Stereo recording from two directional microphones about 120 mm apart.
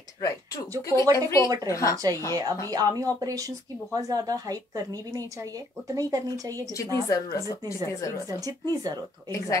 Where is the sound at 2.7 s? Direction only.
30° right (ahead or behind).